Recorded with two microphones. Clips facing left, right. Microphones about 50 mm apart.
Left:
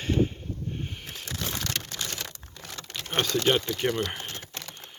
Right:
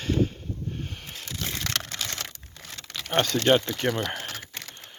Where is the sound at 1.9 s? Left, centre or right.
Right.